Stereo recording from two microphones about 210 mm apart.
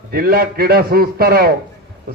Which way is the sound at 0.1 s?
45° right (ahead or behind).